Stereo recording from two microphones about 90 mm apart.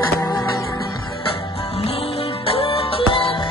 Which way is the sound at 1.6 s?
90° left.